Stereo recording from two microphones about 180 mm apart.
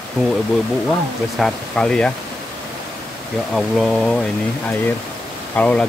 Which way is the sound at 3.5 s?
Centre (ahead or behind).